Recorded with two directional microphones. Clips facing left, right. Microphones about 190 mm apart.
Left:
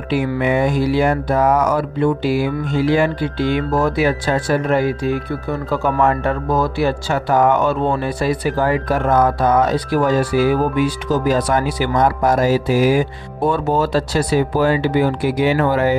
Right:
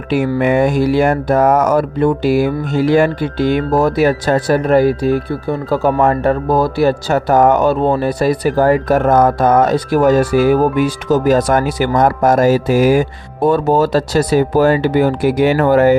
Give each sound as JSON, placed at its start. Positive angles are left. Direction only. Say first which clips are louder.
{"t": 0.1, "sound": "speech", "louder": "right 4 dB", "side_deg": -45}